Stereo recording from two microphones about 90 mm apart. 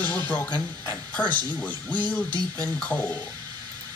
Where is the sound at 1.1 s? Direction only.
20° left (ahead or behind).